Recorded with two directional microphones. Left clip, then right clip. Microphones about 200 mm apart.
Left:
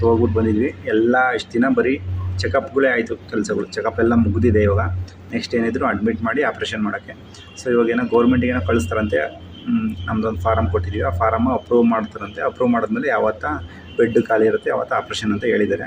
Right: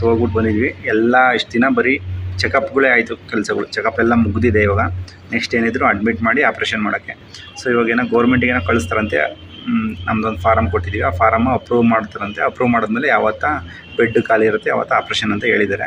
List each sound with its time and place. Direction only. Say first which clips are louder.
0.0 s a man's voice: right 1 dB; 25° right (ahead or behind)